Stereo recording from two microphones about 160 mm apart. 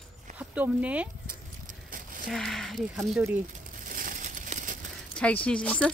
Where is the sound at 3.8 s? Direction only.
55° right (ahead or behind).